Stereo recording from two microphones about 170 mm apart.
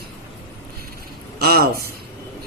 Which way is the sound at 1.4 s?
65° right (ahead or behind).